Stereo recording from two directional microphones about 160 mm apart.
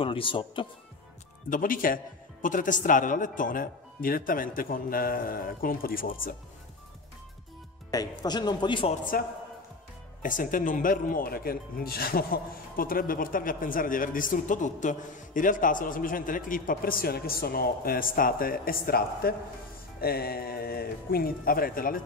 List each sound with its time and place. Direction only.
0.0 s speech: 35° left (ahead or behind)
1.5 s speech: 60° left (ahead or behind)
7.9 s a man's voice: 25° left (ahead or behind)
9.1 s speech: 65° left (ahead or behind)